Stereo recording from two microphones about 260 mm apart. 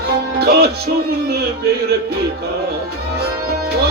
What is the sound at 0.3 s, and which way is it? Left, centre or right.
Music, right.